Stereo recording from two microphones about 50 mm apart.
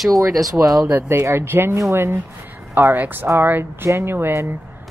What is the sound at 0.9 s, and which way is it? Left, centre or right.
Speech, right.